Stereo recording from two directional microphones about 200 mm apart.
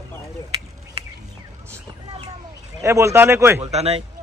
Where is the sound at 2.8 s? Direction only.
15° right (ahead or behind).